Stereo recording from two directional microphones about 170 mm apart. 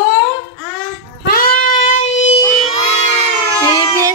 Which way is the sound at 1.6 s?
50° left (ahead or behind).